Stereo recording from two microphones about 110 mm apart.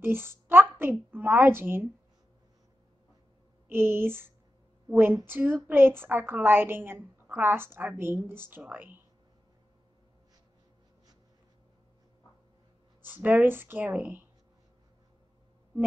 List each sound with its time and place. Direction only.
0.0 s a sound: 20° right (ahead or behind)
1.1 s a woman's voice: 20° right (ahead or behind)
3.6 s a woman's voice: 20° right (ahead or behind)
13.0 s speech: 15° right (ahead or behind)